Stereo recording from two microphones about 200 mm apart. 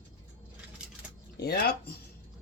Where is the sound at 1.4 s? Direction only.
55° left (ahead or behind).